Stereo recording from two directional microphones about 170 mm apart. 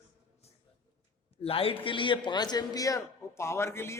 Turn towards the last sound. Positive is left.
turn(degrees=15)  # may be behind; listen again after turning